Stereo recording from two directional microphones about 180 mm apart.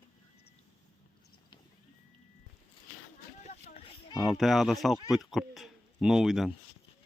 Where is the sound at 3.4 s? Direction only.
35° left (ahead or behind).